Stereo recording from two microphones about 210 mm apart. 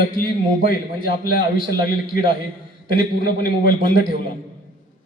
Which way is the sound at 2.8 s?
45° left (ahead or behind).